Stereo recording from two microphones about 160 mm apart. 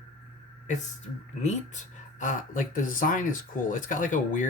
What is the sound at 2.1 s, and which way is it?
Speech, 50° left (ahead or behind).